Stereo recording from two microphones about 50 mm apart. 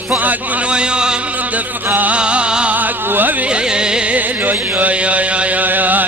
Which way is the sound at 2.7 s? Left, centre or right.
Right.